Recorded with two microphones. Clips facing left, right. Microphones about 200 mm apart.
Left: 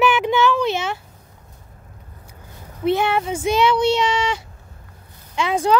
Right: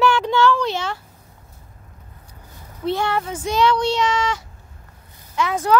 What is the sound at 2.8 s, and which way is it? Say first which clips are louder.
Speech: left 3 dB; 20° left (ahead or behind).